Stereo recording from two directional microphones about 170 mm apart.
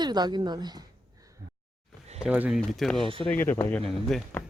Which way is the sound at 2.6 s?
Centre (ahead or behind).